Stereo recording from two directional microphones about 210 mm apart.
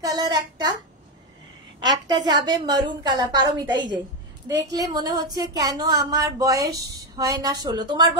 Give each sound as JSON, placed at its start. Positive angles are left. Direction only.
{"t": 0.0, "sound": "a woman's voice", "side_deg": -20}
{"t": 2.0, "sound": "a woman's voice", "side_deg": -20}